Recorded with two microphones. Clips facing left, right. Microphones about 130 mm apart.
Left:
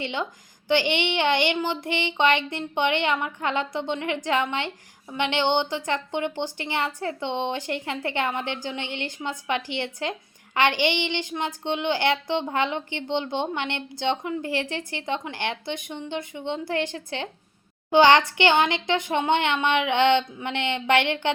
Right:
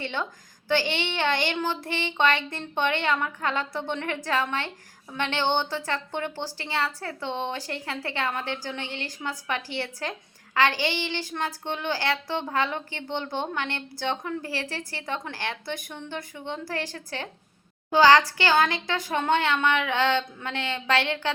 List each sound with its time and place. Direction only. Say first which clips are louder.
0.0 s a woman's voice: left 2 dB; 15° left (ahead or behind)